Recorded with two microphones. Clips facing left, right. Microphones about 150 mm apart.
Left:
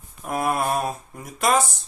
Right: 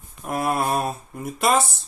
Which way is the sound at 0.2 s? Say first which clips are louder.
Even; centre (ahead or behind).